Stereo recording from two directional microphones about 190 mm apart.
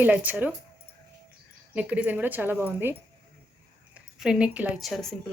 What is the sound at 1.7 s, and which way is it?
Speech, 5° right (ahead or behind).